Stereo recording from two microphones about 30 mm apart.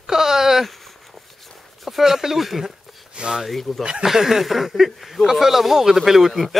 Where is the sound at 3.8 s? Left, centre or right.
Right.